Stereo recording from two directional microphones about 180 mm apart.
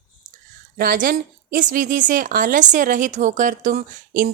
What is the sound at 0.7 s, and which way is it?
Speech, 55° right (ahead or behind).